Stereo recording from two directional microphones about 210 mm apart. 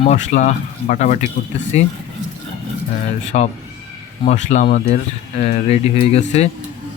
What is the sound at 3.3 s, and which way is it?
Speech, 35° left (ahead or behind).